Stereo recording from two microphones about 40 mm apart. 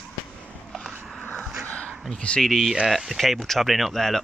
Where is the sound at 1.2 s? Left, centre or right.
Left.